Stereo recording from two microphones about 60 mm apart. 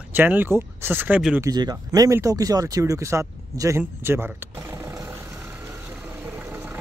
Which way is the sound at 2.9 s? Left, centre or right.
Right.